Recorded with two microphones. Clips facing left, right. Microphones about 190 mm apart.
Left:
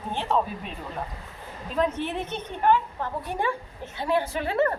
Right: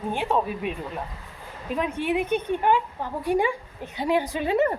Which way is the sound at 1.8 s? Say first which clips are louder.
Right 1 dB; 10° right (ahead or behind).